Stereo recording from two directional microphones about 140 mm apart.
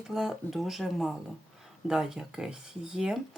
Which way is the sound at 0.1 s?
Centre (ahead or behind).